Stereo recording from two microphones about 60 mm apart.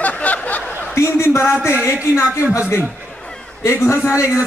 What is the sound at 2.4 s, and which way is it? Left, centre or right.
Speech, right.